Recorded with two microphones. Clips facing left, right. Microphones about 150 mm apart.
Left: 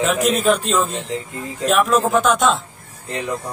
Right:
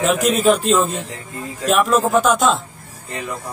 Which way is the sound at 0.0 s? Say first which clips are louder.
Right 2 dB; centre (ahead or behind).